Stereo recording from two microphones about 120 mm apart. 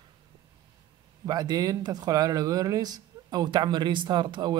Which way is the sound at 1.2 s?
35° right (ahead or behind).